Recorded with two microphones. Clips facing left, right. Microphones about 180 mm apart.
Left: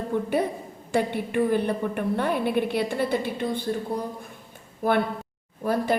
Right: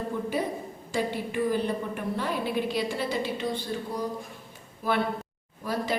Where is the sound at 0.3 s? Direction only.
60° left (ahead or behind).